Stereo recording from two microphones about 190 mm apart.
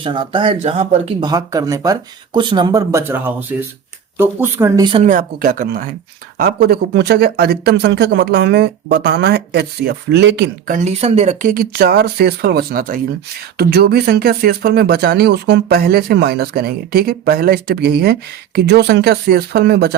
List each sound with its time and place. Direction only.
0.0 s speech: 25° right (ahead or behind)
1.3 s speech: 20° right (ahead or behind)
4.8 s speech: 25° right (ahead or behind)
5.0 s speech: 45° right (ahead or behind); by 10.5 s 65° right (ahead or behind)
10.7 s speech: 40° right (ahead or behind); by 20.0 s 60° right (ahead or behind)